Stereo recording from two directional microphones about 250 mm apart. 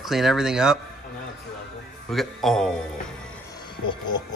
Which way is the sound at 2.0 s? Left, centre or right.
Centre.